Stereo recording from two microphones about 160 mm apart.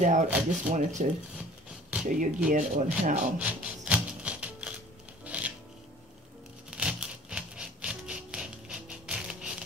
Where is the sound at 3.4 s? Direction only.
10° right (ahead or behind).